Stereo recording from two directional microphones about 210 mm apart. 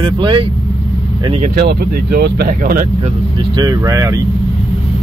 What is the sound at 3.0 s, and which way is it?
Speech, 20° right (ahead or behind).